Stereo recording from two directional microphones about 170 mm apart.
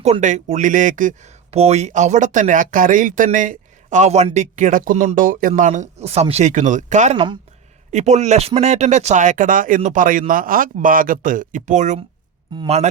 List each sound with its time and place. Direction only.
0.0 s speech: 45° right (ahead or behind)